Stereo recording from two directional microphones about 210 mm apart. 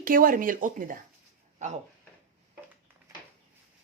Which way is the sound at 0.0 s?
40° right (ahead or behind).